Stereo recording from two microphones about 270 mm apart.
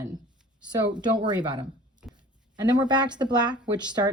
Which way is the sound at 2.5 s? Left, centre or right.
Centre.